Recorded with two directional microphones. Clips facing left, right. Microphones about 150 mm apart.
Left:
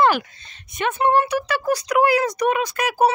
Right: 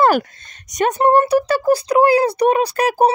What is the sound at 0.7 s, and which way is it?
Speech, 40° right (ahead or behind).